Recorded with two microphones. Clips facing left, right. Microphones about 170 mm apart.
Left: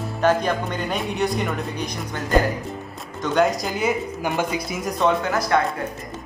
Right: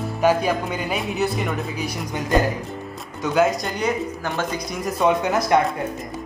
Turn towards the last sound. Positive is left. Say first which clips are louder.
# right 2 dB
turn(degrees=-20)  # may be behind; listen again after turning